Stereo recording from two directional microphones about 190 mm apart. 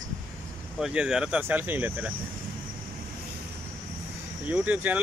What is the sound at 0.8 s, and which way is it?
Speech, 5° right (ahead or behind).